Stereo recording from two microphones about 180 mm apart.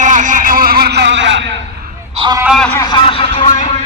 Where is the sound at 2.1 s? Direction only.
25° right (ahead or behind).